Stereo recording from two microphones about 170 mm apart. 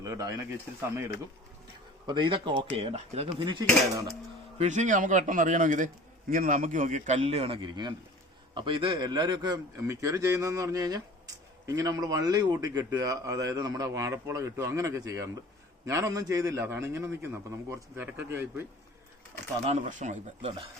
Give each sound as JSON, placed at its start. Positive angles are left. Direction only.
{"t": 0.0, "sound": "speech", "side_deg": -20}
{"t": 2.0, "sound": "a man's voice", "side_deg": -30}
{"t": 4.5, "sound": "a man's voice", "side_deg": -45}
{"t": 19.6, "sound": "a man's voice", "side_deg": -40}